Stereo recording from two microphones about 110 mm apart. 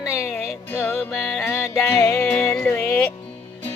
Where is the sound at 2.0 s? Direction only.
25° left (ahead or behind).